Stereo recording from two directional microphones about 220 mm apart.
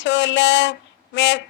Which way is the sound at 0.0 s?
55° left (ahead or behind).